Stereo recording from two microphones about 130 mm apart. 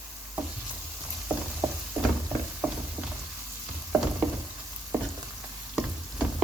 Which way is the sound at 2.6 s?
Centre (ahead or behind).